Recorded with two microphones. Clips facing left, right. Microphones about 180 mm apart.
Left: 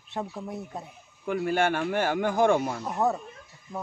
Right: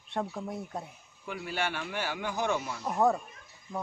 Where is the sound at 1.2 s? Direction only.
50° left (ahead or behind).